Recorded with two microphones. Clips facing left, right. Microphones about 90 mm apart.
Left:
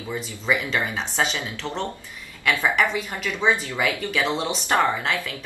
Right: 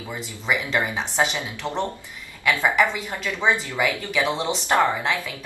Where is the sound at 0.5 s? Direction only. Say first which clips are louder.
Even; 20° right (ahead or behind).